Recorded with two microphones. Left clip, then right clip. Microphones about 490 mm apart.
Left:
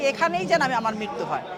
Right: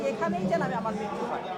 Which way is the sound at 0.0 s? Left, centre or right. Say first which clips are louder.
Left 6 dB; left.